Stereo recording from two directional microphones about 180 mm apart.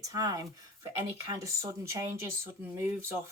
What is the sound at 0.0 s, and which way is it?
Speech, 20° right (ahead or behind).